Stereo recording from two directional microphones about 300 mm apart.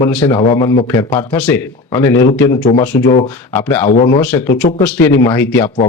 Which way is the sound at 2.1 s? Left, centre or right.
Left.